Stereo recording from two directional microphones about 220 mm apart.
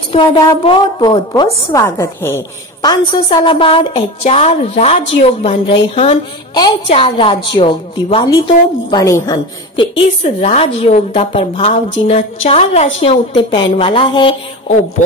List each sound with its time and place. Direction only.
0.1 s a woman's voice: 20° left (ahead or behind)
15.0 s speech: 35° left (ahead or behind)